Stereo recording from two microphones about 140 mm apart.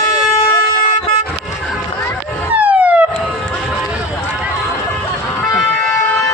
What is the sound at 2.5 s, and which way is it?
Police car, 10° right (ahead or behind).